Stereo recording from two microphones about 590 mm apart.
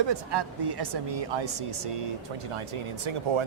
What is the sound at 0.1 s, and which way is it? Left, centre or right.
Speech, right.